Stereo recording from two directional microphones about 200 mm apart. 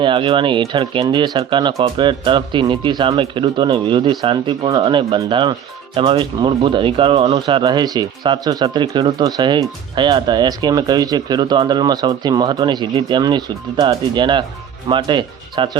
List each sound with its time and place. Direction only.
0.0 s speech: 25° right (ahead or behind)